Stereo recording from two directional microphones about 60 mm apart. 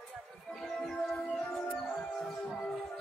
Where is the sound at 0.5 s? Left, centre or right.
Centre.